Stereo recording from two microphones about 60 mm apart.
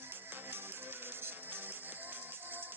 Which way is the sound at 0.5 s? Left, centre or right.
Right.